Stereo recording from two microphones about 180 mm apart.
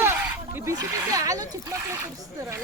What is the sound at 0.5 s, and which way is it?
Speech, 15° right (ahead or behind).